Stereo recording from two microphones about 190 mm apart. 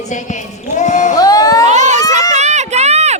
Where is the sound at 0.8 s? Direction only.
40° left (ahead or behind).